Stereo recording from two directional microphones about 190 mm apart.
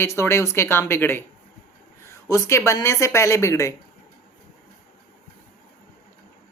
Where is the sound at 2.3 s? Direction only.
15° left (ahead or behind).